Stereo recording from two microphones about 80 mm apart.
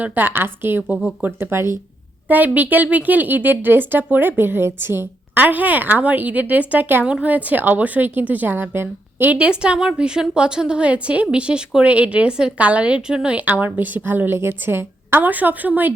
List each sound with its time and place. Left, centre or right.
0.0 s a woman's voice: right
2.2 s a woman's voice: right